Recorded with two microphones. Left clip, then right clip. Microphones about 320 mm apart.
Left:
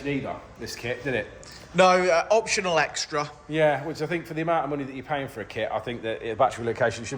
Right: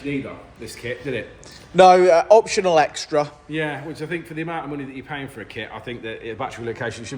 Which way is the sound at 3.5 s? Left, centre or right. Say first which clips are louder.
Left 4 dB; left.